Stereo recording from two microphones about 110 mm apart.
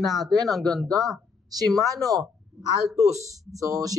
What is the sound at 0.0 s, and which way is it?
Speech, centre (ahead or behind).